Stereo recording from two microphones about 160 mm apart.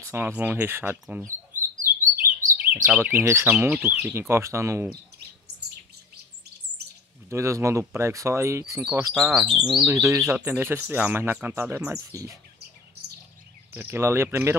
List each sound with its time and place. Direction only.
0.0 s speech: 15° right (ahead or behind)
1.8 s chirp: 55° right (ahead or behind)
2.7 s speech: 10° right (ahead or behind)
7.2 s speech: 20° right (ahead or behind)
9.5 s speech: 5° right (ahead or behind)
9.8 s speech: 20° right (ahead or behind)
13.7 s speech: 15° right (ahead or behind)